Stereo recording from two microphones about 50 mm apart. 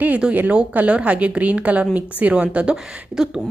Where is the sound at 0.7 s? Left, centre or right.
Right.